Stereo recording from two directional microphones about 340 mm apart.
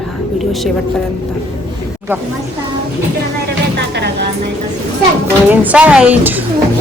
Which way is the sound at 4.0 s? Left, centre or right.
Right.